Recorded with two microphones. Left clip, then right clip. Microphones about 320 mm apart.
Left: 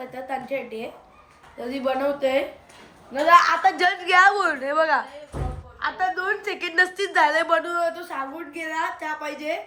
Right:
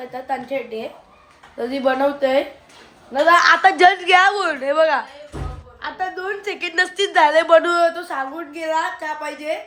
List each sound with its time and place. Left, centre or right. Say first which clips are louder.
0.1 s a woman's voice: right 5 dB; centre
7.6 s a man's voice: right 8 dB; right
8.5 s a woman's voice: right 6 dB; centre